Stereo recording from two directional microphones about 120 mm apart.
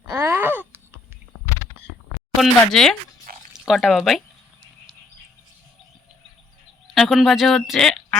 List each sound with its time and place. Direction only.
0.1 s wail: 20° right (ahead or behind)
2.4 s speech: centre (ahead or behind)
6.9 s speech: centre (ahead or behind)